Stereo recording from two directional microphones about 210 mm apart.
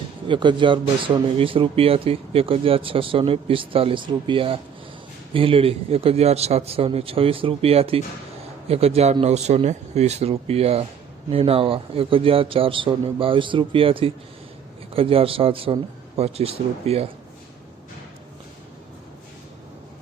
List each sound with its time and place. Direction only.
0.3 s speech: 20° right (ahead or behind)